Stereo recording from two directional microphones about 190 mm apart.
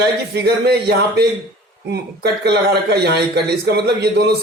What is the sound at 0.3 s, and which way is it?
Speech, 60° right (ahead or behind).